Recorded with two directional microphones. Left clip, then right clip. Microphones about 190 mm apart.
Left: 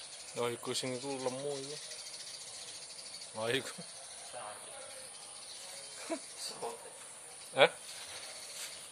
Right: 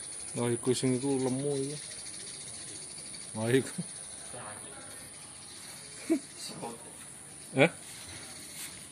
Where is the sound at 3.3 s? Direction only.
Centre (ahead or behind).